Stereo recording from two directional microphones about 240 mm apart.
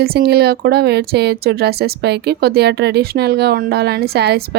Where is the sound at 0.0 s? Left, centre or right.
Right.